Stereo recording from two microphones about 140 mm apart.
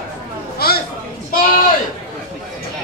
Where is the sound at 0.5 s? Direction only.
90° left.